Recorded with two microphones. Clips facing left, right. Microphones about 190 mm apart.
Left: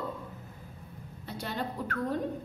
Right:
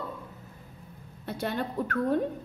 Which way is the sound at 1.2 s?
55° right (ahead or behind).